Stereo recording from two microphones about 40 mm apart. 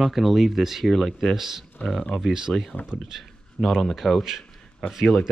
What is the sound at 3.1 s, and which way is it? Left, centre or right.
Speech, centre.